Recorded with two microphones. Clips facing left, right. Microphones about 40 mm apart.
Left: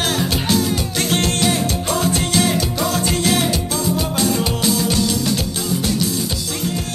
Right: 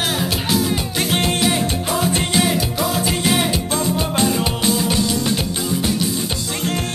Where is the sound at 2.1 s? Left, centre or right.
Right.